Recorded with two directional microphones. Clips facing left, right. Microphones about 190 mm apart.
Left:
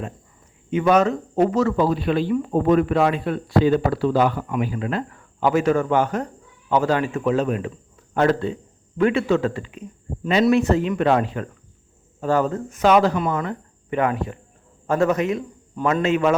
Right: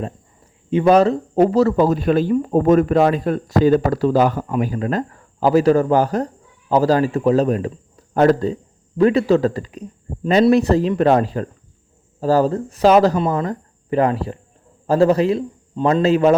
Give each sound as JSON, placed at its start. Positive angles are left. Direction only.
{"t": 0.7, "sound": "speech", "side_deg": -35}